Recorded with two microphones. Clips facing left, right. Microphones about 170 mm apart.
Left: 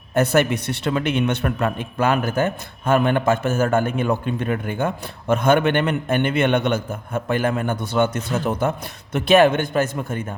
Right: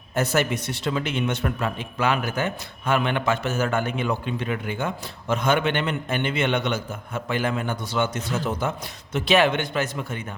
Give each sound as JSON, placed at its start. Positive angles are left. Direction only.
{"t": 0.1, "sound": "a man's voice", "side_deg": 60}